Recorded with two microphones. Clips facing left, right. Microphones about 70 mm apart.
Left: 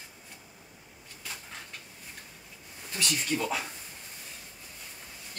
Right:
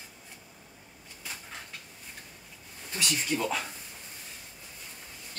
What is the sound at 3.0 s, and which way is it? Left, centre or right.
Speech, centre.